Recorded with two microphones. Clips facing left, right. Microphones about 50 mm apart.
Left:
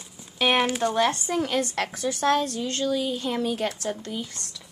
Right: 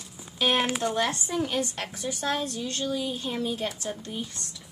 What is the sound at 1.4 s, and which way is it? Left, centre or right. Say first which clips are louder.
A woman's voice: left 3 dB; left.